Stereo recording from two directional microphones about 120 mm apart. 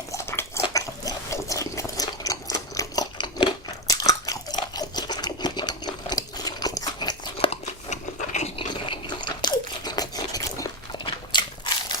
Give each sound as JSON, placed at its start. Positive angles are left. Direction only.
{"t": 0.1, "sound": "a sound", "side_deg": 20}
{"t": 7.3, "sound": "crunch", "side_deg": 60}
{"t": 8.5, "sound": "crunch", "side_deg": 45}
{"t": 11.0, "sound": "biting", "side_deg": 40}